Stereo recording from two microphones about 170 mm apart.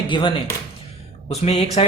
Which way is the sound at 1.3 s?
40° left (ahead or behind).